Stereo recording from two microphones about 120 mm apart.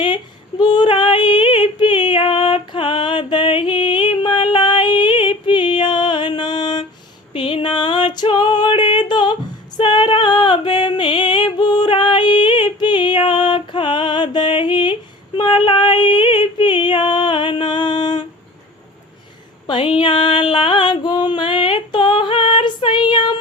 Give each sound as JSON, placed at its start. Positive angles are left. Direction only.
{"t": 0.6, "sound": "female singing", "side_deg": 40}
{"t": 9.7, "sound": "music", "side_deg": 40}
{"t": 15.4, "sound": "female singing", "side_deg": 40}
{"t": 19.6, "sound": "music", "side_deg": 45}